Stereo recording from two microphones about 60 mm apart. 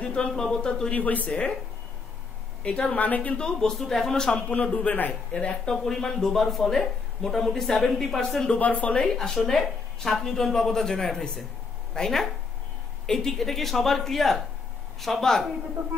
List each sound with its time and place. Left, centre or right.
0.0 s speech: centre
0.9 s a woman's voice: left
2.6 s a woman's voice: left
3.3 s speech: centre
4.6 s a woman's voice: left
5.7 s speech: centre